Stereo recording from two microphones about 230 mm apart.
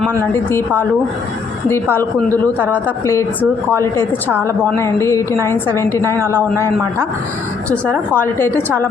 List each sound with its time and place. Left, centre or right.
1.7 s a woman's voice: centre
7.7 s a woman's voice: centre